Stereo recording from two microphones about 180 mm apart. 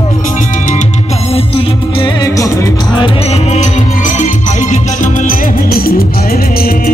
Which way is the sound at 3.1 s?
35° left (ahead or behind).